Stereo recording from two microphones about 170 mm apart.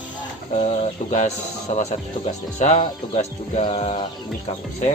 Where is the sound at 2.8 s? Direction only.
40° left (ahead or behind).